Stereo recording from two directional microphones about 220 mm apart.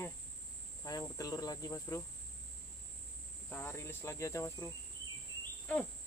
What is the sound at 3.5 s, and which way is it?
Cricket, 10° left (ahead or behind).